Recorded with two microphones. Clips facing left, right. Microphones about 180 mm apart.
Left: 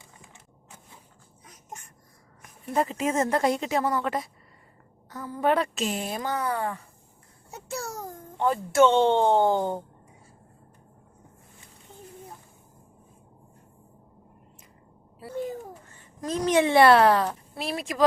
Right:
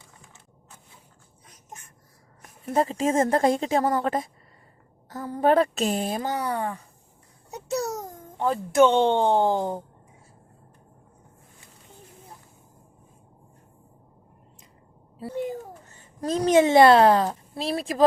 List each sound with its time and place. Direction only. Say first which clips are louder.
2.7 s speech: right 3 dB; 30° right (ahead or behind)
3.8 s a woman's voice: right 3 dB; 45° right (ahead or behind)
5.1 s a woman's voice: right 4 dB; 40° right (ahead or behind)
6.3 s speech: right 1 dB; 20° right (ahead or behind)
7.5 s a sound: right 7 dB; 20° right (ahead or behind)
8.4 s speech: right 1 dB; 15° right (ahead or behind)
15.9 s a sound: right 4 dB; 25° right (ahead or behind)
16.6 s speech: right 1 dB; 25° right (ahead or behind)